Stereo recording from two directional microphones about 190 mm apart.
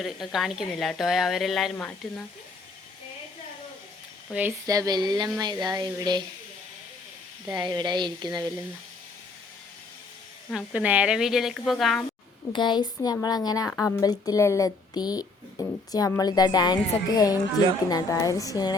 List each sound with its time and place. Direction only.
0.0 s speech: centre (ahead or behind)
1.7 s speech: 10° left (ahead or behind)
4.3 s speech: 10° right (ahead or behind)
7.5 s speech: 20° right (ahead or behind)
10.5 s speech: centre (ahead or behind)
12.5 s speech: 25° left (ahead or behind)